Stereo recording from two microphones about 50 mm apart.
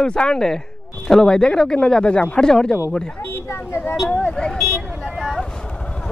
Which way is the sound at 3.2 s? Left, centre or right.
Left.